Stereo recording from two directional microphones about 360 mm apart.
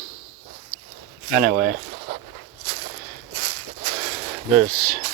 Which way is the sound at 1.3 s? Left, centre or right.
Right.